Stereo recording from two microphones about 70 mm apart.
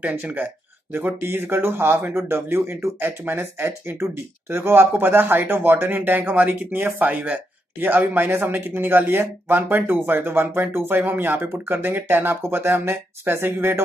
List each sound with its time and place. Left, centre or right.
0.0 s speech: right